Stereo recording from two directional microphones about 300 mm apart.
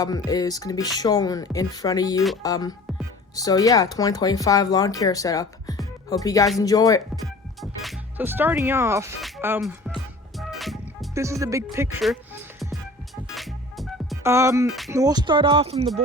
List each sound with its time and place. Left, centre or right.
0.0 s speech: centre
7.3 s music: centre
13.3 s speech: centre